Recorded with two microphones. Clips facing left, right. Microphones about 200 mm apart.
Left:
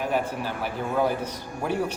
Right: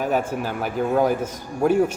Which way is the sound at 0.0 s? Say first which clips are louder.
Right 4 dB; 45° right (ahead or behind).